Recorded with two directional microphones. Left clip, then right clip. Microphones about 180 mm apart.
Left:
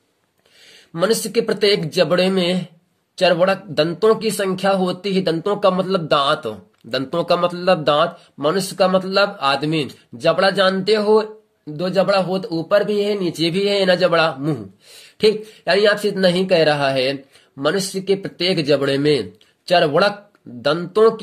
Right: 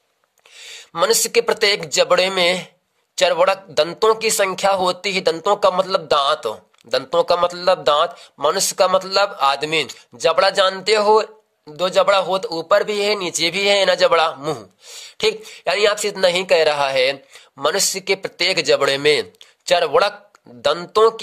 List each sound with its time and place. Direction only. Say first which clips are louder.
0.9 s a man's voice: right 2 dB; 45° right (ahead or behind)